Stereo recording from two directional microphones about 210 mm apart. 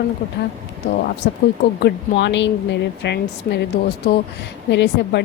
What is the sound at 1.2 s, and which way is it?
Speech, 50° left (ahead or behind).